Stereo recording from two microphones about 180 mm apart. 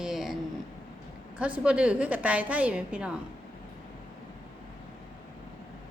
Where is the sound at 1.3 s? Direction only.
5° right (ahead or behind).